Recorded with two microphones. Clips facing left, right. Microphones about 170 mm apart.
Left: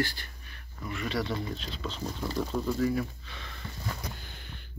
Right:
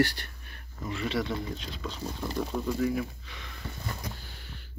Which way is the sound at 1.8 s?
10° right (ahead or behind).